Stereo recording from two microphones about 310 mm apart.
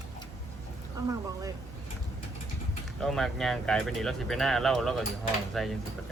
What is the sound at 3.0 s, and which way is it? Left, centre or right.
Speech, centre.